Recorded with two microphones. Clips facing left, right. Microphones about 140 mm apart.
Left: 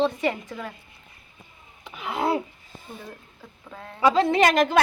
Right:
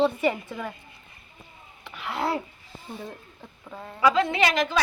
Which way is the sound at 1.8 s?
15° left (ahead or behind).